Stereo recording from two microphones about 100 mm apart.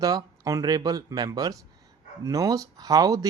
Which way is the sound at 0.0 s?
40° right (ahead or behind).